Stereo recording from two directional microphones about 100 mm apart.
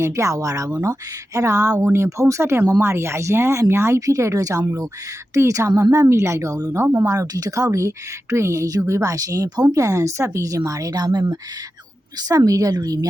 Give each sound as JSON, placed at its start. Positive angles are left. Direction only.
{"t": 0.0, "sound": "speech", "side_deg": -30}